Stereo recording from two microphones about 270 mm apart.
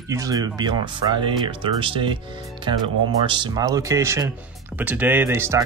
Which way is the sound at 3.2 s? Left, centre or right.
Centre.